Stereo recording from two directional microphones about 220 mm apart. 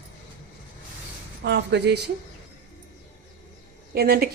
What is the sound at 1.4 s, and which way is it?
Speech, 50° right (ahead or behind).